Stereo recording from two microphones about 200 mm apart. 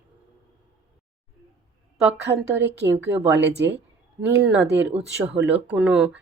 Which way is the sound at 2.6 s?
60° right (ahead or behind).